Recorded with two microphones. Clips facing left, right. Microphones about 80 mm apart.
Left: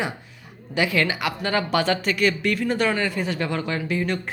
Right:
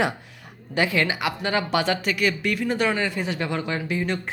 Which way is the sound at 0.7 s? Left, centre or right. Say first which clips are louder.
Even; right.